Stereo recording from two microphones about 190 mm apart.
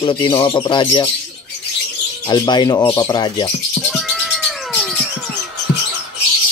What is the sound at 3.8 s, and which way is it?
Cat, centre (ahead or behind).